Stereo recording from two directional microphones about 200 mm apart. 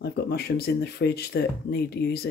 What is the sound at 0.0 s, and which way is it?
Speech, 55° left (ahead or behind).